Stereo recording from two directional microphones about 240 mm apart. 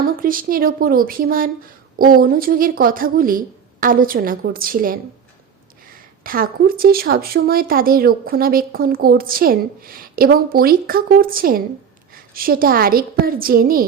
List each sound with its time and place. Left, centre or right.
0.2 s speech: right
6.2 s speech: right